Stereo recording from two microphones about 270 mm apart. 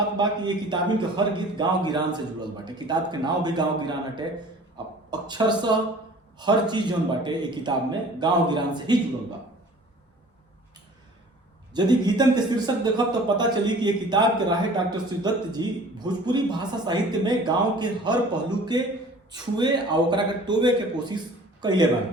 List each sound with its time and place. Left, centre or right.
0.2 s speech: centre
11.7 s speech: centre